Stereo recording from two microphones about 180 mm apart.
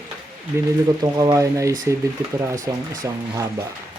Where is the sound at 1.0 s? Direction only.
20° right (ahead or behind).